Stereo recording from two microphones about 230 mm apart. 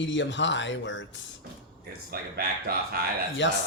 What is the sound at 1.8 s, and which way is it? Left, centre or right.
A man's voice, right.